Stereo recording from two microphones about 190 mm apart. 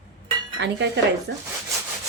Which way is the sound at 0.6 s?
70° right (ahead or behind).